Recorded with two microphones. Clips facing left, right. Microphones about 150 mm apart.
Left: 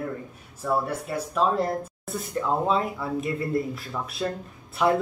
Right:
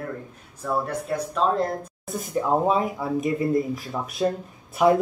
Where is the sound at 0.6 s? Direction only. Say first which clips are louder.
Even; 5° left (ahead or behind).